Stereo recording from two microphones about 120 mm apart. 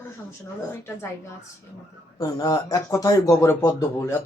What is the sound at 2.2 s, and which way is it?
Speech, 35° left (ahead or behind).